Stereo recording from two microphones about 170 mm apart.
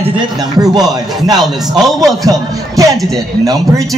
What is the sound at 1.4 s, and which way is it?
Speech, centre (ahead or behind).